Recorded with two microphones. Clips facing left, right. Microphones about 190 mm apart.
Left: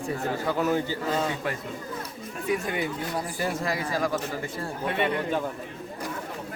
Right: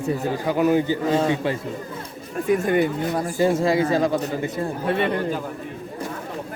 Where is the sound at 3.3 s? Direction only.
25° right (ahead or behind).